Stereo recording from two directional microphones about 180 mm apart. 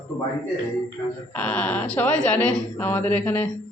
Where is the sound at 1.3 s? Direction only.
5° left (ahead or behind).